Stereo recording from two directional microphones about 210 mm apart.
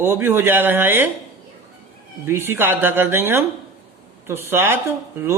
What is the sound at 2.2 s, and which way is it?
Speech, 10° right (ahead or behind).